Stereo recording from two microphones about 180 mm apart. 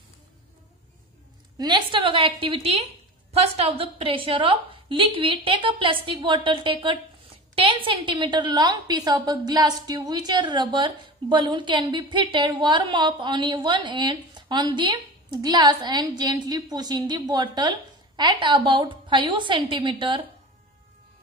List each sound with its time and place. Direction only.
1.6 s a woman's voice: 25° right (ahead or behind)